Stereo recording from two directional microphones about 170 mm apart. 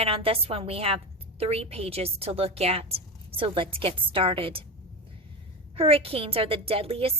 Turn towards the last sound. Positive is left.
turn(degrees=-35)  # may be behind; listen again after turning